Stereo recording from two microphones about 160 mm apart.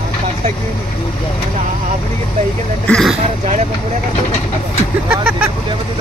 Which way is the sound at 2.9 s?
5° left (ahead or behind).